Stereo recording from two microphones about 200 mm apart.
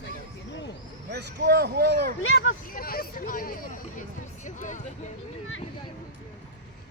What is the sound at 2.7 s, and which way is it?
Speech, 45° left (ahead or behind).